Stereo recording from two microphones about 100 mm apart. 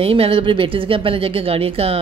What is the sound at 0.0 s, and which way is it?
Speech, 70° right (ahead or behind).